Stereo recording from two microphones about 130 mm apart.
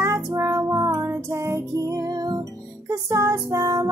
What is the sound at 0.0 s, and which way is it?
Music, 20° right (ahead or behind).